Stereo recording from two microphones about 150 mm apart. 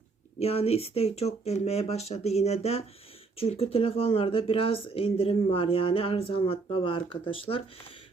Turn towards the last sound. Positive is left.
turn(degrees=35)  # may be behind; listen again after turning